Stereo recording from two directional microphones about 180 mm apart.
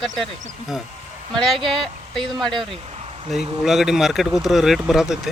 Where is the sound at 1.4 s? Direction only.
Centre (ahead or behind).